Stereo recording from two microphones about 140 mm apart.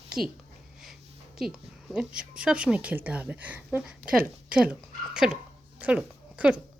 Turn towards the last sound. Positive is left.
turn(degrees=-10)  # may be behind; listen again after turning